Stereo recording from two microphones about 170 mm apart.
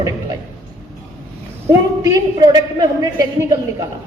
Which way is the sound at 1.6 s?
20° right (ahead or behind).